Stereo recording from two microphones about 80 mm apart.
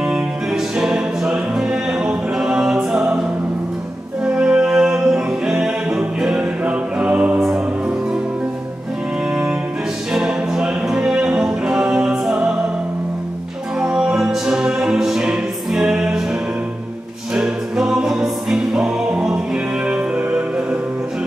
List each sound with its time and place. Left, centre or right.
0.0 s music: centre
4.2 s music: centre
9.3 s music: centre
13.7 s music: centre
17.3 s music: centre